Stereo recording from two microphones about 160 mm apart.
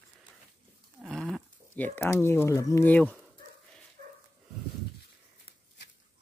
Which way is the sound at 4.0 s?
70° right (ahead or behind).